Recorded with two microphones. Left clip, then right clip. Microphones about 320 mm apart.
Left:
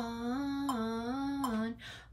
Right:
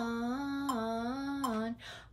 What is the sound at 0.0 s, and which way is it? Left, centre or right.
Mantra, centre.